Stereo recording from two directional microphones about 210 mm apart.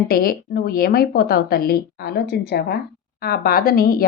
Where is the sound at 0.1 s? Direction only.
45° left (ahead or behind).